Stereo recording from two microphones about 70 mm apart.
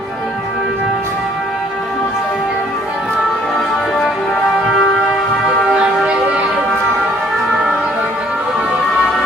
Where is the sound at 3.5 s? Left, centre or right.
Centre.